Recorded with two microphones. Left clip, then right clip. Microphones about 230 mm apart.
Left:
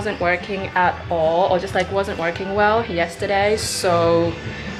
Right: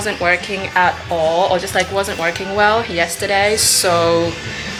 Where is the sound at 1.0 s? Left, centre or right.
Left.